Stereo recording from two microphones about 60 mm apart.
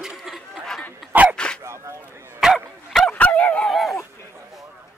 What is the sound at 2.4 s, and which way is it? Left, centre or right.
Dog, centre.